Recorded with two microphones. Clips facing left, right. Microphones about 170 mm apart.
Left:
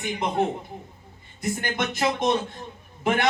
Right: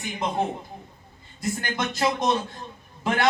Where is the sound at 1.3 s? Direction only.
20° left (ahead or behind).